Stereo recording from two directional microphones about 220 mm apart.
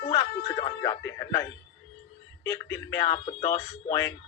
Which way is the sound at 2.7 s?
15° left (ahead or behind).